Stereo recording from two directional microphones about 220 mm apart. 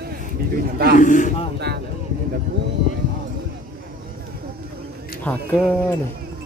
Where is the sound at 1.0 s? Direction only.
35° left (ahead or behind).